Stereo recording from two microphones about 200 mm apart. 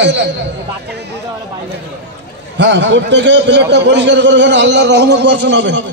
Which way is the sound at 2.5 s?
60° right (ahead or behind).